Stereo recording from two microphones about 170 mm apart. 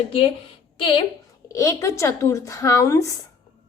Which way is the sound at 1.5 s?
20° left (ahead or behind).